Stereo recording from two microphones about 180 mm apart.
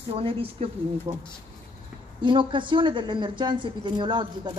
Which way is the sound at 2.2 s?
25° right (ahead or behind).